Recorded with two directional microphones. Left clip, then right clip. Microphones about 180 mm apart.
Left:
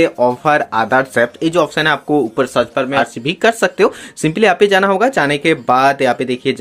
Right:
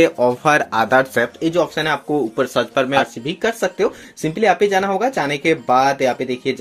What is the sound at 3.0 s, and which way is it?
Speech, 20° left (ahead or behind).